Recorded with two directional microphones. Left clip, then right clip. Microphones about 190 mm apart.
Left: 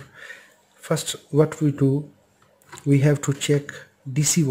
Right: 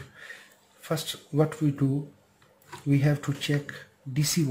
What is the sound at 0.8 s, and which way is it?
Speech, 45° left (ahead or behind).